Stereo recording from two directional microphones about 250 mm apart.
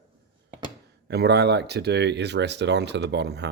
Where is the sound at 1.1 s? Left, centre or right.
Right.